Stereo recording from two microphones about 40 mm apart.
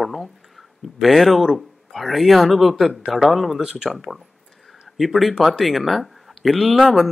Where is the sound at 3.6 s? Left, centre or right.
Centre.